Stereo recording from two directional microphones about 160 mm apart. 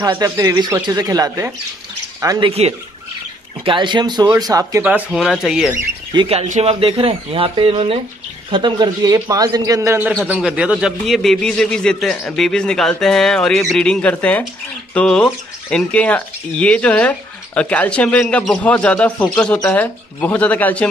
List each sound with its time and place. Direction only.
0.0 s a man's voice: 25° right (ahead or behind)
3.6 s a man's voice: 30° right (ahead or behind); by 5.8 s 5° right (ahead or behind)
6.1 s a man's voice: 40° right (ahead or behind); by 20.9 s 10° left (ahead or behind)